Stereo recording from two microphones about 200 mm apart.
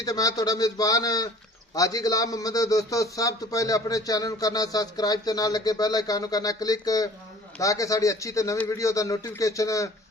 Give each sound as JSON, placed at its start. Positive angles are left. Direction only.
{"t": 0.0, "sound": "a man's voice", "side_deg": 20}